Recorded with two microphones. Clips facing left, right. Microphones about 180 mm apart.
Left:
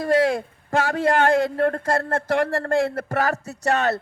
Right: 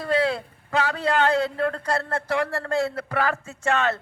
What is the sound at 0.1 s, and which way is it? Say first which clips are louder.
A man's voice: left 3 dB; 45° left (ahead or behind).